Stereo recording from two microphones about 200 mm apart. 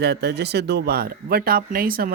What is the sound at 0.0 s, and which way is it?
Speech, 55° right (ahead or behind).